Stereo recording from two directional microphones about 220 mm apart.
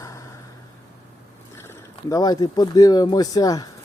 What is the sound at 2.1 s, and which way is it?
Speech, 15° left (ahead or behind).